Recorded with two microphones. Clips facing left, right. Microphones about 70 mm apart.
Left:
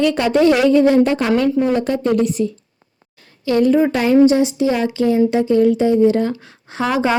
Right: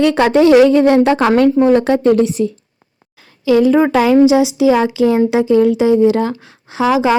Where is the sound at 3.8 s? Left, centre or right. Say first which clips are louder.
Right 3 dB; right.